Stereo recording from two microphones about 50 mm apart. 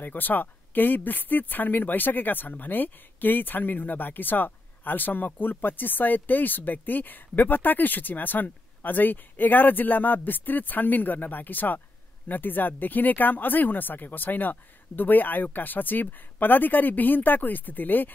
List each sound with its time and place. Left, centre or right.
0.0 s speech: left